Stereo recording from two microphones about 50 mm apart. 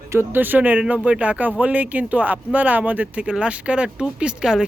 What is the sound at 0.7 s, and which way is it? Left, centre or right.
Speech, right.